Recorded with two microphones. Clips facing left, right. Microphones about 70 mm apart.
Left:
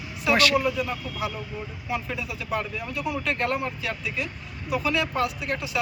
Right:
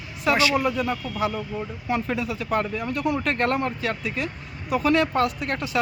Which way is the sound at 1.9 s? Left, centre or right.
Right.